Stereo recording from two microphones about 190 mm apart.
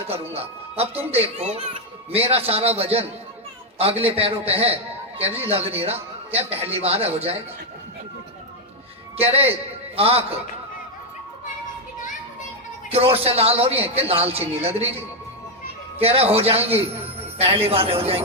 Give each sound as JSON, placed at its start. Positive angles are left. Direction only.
{"t": 0.1, "sound": "a man's voice", "side_deg": -30}
{"t": 9.1, "sound": "a man's voice", "side_deg": -30}
{"t": 12.9, "sound": "speech", "side_deg": -30}
{"t": 16.0, "sound": "speech", "side_deg": -30}